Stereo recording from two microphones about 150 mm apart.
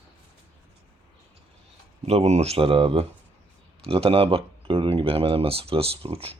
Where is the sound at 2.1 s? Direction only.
45° right (ahead or behind).